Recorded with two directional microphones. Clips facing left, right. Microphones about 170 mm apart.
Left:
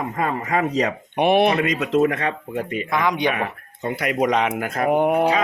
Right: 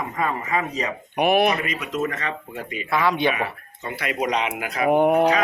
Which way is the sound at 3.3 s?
55° left (ahead or behind).